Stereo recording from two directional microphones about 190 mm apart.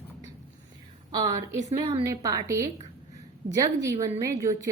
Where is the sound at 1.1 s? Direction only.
20° right (ahead or behind).